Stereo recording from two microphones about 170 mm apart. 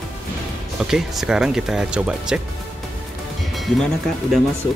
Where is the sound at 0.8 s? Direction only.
Centre (ahead or behind).